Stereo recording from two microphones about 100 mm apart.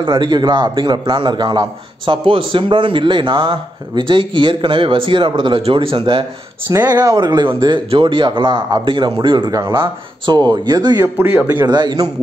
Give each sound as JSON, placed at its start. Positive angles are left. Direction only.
{"t": 0.0, "sound": "a man's voice", "side_deg": -55}
{"t": 6.7, "sound": "speech", "side_deg": -40}
{"t": 7.9, "sound": "a man's voice", "side_deg": -60}
{"t": 9.5, "sound": "speech", "side_deg": -35}
{"t": 9.8, "sound": "speech", "side_deg": -50}
{"t": 11.0, "sound": "speech", "side_deg": -20}
{"t": 11.6, "sound": "speech", "side_deg": -45}